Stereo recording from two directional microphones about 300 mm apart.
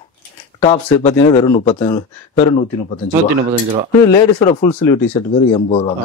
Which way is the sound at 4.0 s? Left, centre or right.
Centre.